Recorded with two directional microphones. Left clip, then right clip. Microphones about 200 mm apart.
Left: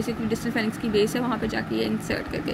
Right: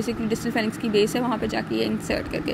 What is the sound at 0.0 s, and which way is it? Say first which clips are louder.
A woman's voice: right 1 dB; 20° right (ahead or behind).